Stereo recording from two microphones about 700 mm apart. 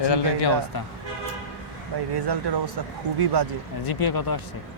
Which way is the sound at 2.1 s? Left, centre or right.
Right.